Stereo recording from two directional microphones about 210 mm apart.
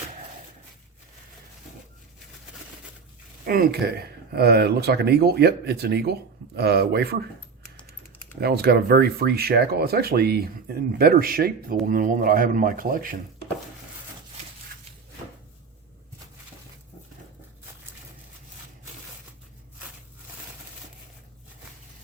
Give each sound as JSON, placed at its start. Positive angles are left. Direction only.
{"t": 3.4, "sound": "speech", "side_deg": -45}
{"t": 8.4, "sound": "speech", "side_deg": -50}